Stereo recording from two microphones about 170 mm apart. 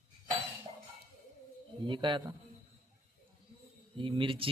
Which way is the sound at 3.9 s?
30° right (ahead or behind).